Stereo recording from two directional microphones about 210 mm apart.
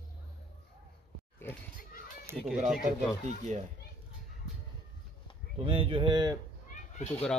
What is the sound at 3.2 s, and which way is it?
Speech, 35° right (ahead or behind).